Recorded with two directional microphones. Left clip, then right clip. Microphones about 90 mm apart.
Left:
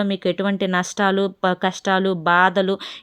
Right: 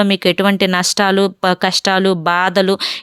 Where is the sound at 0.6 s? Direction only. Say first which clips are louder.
Right 6 dB; 40° right (ahead or behind).